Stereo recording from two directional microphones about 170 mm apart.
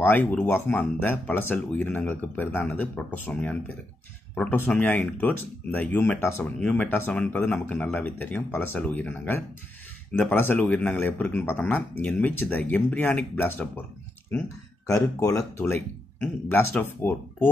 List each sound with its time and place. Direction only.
0.0 s speech: 10° left (ahead or behind)
14.9 s speech: 20° left (ahead or behind)